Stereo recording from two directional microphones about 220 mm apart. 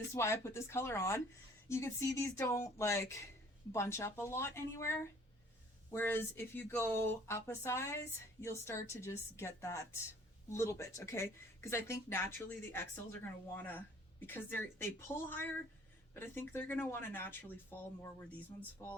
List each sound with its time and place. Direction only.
0.1 s speech: 10° left (ahead or behind)